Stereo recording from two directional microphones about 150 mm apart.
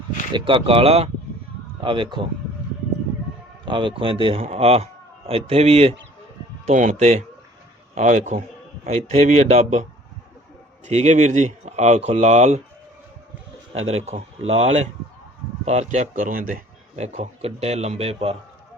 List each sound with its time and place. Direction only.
0.3 s a man's voice: 35° right (ahead or behind)
3.7 s a man's voice: 35° right (ahead or behind); by 9.8 s 50° right (ahead or behind)
10.8 s speech: 50° right (ahead or behind)
13.7 s speech: 45° right (ahead or behind); by 16.6 s 65° right (ahead or behind)
17.0 s speech: 50° right (ahead or behind)